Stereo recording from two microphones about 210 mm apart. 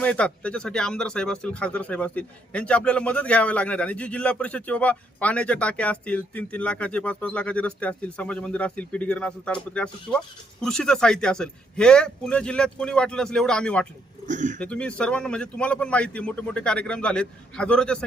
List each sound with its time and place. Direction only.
0.0 s speech: 5° left (ahead or behind)
14.3 s speech: 35° right (ahead or behind)
14.6 s speech: 5° left (ahead or behind)